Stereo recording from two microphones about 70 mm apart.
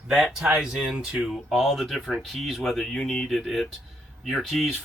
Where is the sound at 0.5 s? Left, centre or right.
Centre.